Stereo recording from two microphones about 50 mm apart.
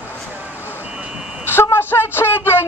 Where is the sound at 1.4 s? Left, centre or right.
Left.